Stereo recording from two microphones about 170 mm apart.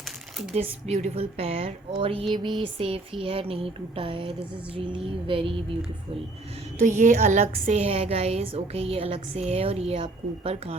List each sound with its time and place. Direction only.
0.5 s a woman's voice: 40° right (ahead or behind)
6.7 s a woman's voice: 45° right (ahead or behind)